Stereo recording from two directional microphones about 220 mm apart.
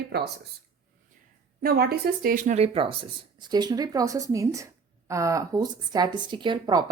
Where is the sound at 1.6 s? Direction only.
45° right (ahead or behind).